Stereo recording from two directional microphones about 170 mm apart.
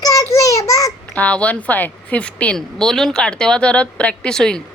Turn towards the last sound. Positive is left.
turn(degrees=5)  # may be behind; listen again after turning